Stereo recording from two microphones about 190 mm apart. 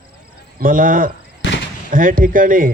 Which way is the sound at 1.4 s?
75° left (ahead or behind).